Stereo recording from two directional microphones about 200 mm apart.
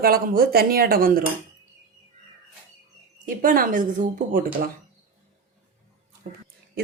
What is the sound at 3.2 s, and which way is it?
Speech, 45° right (ahead or behind).